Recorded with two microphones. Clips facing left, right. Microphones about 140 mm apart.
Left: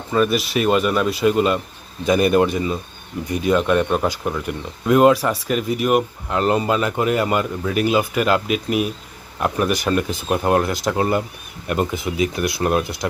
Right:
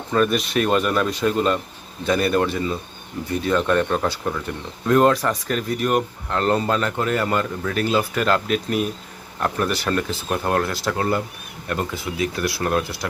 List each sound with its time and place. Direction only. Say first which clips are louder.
0.1 s speech: left 1 dB; 5° left (ahead or behind)